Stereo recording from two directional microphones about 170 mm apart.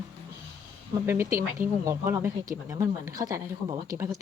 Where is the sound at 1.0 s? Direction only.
15° right (ahead or behind).